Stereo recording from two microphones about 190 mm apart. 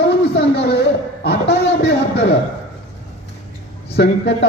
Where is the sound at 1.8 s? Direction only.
65° left (ahead or behind).